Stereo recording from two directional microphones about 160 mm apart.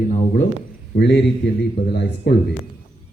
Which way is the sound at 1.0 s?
90° left.